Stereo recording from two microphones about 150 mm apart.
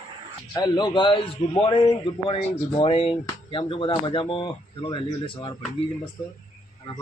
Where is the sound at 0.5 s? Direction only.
30° left (ahead or behind).